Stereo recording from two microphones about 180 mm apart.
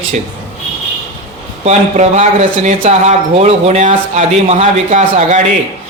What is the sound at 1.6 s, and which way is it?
Speech, 40° right (ahead or behind).